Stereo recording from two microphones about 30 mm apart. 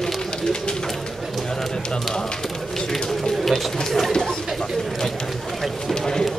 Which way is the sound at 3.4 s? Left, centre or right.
Centre.